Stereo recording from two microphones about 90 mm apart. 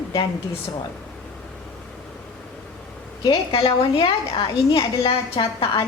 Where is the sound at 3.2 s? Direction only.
65° left (ahead or behind).